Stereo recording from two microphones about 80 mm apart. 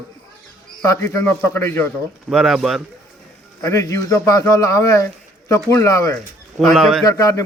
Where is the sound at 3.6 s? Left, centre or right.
Left.